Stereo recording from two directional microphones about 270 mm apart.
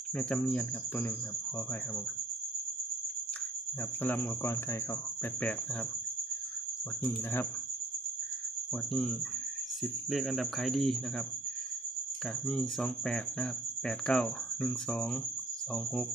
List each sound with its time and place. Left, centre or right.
0.2 s speech: centre
4.0 s speech: centre
8.7 s speech: centre
12.5 s speech: centre